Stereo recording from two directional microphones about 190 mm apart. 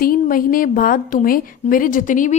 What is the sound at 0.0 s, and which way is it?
A woman's voice, 50° left (ahead or behind).